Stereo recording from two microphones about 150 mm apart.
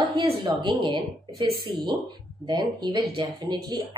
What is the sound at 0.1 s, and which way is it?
A woman's voice, 30° right (ahead or behind).